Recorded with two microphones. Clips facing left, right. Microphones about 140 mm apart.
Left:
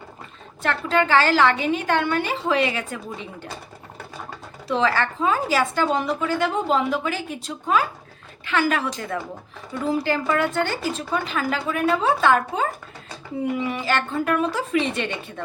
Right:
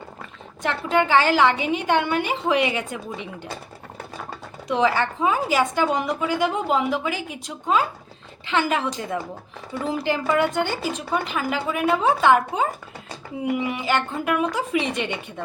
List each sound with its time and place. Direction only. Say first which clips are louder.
0.6 s a woman's voice: even; 15° right (ahead or behind)
4.7 s a woman's voice: right 1 dB; 15° right (ahead or behind)